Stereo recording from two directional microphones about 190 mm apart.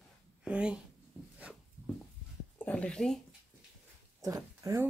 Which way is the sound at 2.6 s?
5° left (ahead or behind).